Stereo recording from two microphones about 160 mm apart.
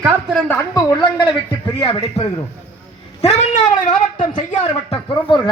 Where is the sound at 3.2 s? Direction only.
40° left (ahead or behind).